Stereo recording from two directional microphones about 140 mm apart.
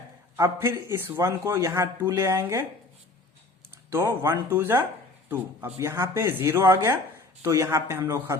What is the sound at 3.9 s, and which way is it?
A man's voice, 20° right (ahead or behind).